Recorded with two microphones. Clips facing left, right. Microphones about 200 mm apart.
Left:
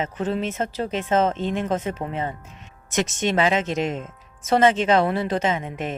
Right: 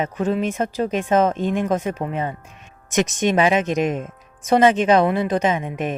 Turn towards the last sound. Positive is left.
turn(degrees=-15)  # may be behind; listen again after turning